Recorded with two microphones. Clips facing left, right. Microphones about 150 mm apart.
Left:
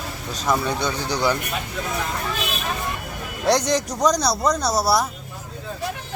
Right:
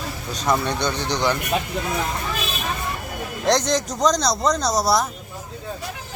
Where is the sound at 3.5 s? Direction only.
10° left (ahead or behind).